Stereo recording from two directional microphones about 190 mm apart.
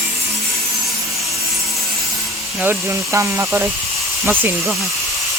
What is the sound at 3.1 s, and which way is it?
Speech, 10° right (ahead or behind).